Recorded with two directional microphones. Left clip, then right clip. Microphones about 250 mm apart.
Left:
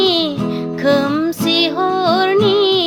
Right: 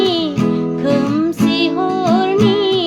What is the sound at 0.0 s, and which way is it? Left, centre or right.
Music, left.